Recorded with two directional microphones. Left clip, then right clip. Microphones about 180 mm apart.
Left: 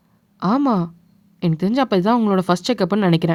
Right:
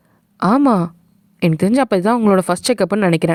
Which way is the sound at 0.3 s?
40° right (ahead or behind).